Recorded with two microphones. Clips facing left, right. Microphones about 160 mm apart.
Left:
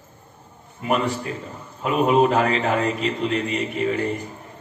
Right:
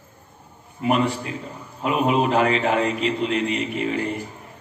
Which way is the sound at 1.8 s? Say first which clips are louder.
Left 3 dB; 35° left (ahead or behind).